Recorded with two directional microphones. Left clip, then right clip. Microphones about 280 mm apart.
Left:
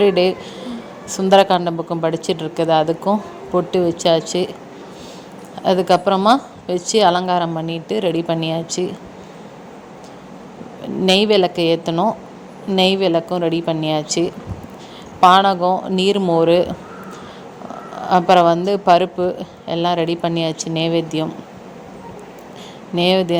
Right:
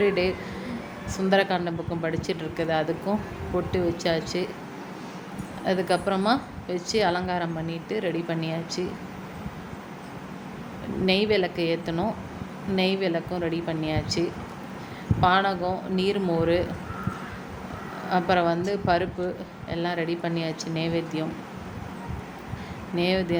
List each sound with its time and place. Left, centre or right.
0.0 s a woman's voice: left
5.6 s a woman's voice: left
11.0 s a woman's voice: left
18.1 s a woman's voice: left
23.0 s a woman's voice: left